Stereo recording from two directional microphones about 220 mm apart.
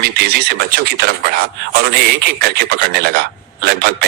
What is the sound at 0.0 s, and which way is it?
Speech, 50° right (ahead or behind).